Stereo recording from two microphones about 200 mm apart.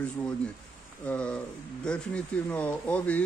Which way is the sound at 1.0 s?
5° left (ahead or behind).